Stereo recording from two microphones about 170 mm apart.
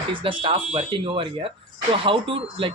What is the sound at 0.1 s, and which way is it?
Speech, 30° right (ahead or behind).